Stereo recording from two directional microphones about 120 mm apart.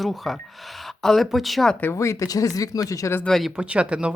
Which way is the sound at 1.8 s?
25° left (ahead or behind).